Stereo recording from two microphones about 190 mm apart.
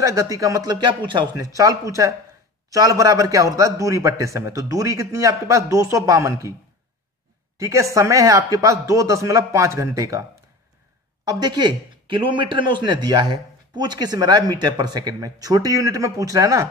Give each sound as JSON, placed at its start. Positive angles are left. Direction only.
{"t": 0.0, "sound": "a man's voice", "side_deg": -15}
{"t": 7.5, "sound": "a man's voice", "side_deg": -15}
{"t": 11.2, "sound": "a man's voice", "side_deg": -20}